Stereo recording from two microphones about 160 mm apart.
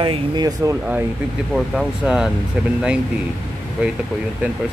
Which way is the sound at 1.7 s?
5° right (ahead or behind).